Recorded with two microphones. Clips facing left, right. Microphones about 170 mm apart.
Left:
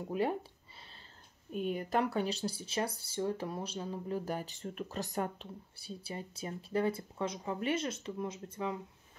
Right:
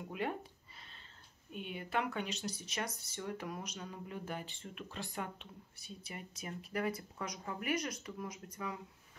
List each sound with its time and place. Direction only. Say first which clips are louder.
0.1 s speech: left 6 dB; 35° left (ahead or behind)
1.5 s speech: left 6 dB; 40° left (ahead or behind); by 8.7 s 25° left (ahead or behind)